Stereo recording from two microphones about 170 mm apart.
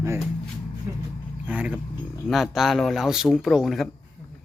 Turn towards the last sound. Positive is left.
turn(degrees=0)  # may be behind; listen again after turning